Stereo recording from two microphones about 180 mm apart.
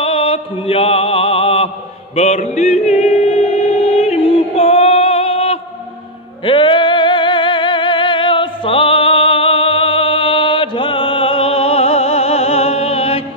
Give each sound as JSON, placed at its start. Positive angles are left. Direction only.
{"t": 0.0, "sound": "mantra", "side_deg": 30}
{"t": 2.1, "sound": "music", "side_deg": 35}